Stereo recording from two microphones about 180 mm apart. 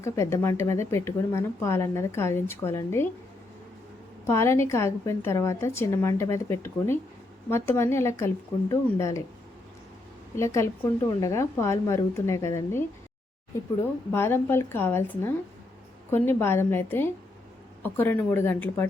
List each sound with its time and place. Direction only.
0.0 s speech: 15° left (ahead or behind)
4.3 s speech: 15° left (ahead or behind)
10.3 s speech: 15° left (ahead or behind)
14.1 s speech: 15° left (ahead or behind)